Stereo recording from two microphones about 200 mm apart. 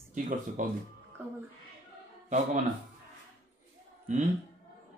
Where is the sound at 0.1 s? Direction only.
40° right (ahead or behind).